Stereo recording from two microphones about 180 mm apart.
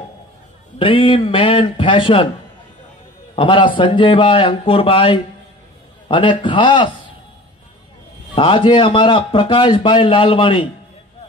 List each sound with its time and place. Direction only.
0.7 s a man's voice: 30° left (ahead or behind)
3.3 s a man's voice: 30° left (ahead or behind)
8.4 s a man's voice: 30° left (ahead or behind)